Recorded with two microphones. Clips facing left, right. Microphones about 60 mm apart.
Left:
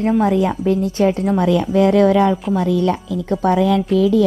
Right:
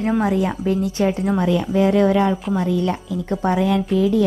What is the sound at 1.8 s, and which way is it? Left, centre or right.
Speech, left.